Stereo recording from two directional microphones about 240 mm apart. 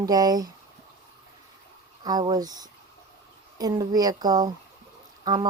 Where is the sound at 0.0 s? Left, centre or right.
Centre.